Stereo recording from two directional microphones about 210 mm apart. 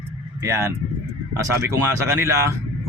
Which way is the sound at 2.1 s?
15° right (ahead or behind).